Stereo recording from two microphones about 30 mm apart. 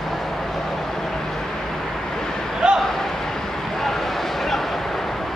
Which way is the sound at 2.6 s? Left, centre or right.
Right.